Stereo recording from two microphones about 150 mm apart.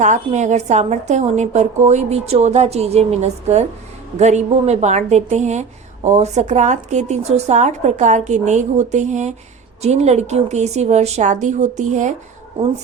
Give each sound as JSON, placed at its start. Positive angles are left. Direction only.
{"t": 0.0, "sound": "a woman's voice", "side_deg": -50}